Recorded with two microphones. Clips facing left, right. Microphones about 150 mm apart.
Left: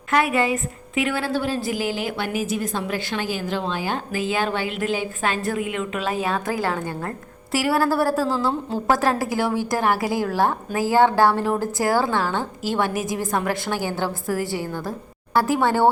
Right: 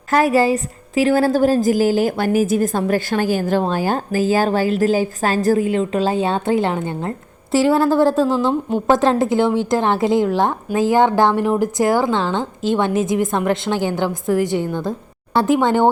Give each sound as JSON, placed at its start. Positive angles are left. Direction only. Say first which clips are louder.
{"t": 0.1, "sound": "a woman's voice", "louder": "right 5 dB", "side_deg": -40}